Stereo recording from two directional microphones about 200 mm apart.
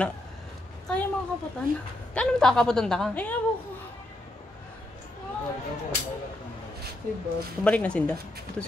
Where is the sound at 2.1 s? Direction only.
5° left (ahead or behind).